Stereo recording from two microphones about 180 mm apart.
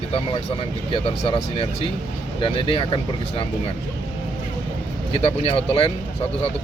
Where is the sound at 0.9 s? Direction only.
30° left (ahead or behind).